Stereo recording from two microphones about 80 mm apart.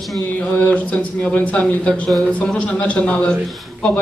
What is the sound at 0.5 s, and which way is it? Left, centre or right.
Speech, centre.